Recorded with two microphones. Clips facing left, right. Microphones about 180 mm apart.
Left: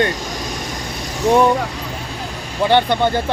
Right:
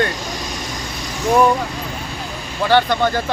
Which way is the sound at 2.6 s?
20° left (ahead or behind).